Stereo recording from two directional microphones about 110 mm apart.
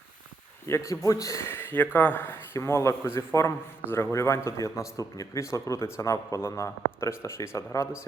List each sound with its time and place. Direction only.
0.7 s a man's voice: 30° left (ahead or behind)